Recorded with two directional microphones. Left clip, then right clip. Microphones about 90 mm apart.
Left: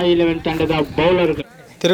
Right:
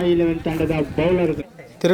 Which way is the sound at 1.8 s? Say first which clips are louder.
Left 2 dB; centre (ahead or behind).